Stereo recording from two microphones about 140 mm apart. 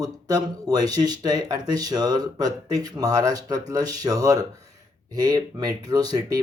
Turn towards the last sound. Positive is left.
turn(degrees=-30)  # may be behind; listen again after turning